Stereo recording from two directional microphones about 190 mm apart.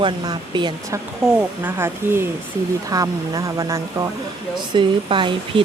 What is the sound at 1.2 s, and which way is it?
Speech, 5° right (ahead or behind).